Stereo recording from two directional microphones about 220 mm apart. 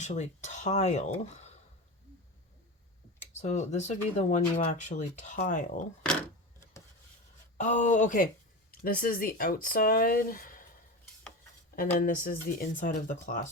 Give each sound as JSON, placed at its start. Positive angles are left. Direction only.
{"t": 0.0, "sound": "speech", "side_deg": 30}
{"t": 3.4, "sound": "speech", "side_deg": 30}
{"t": 7.6, "sound": "speech", "side_deg": 35}
{"t": 11.9, "sound": "speech", "side_deg": 40}